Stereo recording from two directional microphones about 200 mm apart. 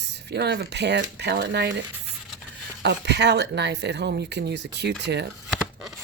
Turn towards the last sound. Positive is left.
turn(degrees=0)  # may be behind; listen again after turning